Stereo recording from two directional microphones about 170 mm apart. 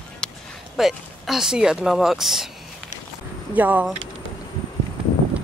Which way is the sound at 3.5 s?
10° right (ahead or behind).